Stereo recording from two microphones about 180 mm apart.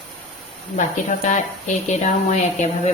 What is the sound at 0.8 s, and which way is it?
Speech, 45° left (ahead or behind).